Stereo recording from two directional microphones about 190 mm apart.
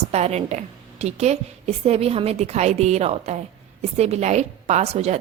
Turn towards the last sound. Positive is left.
turn(degrees=-35)  # may be behind; listen again after turning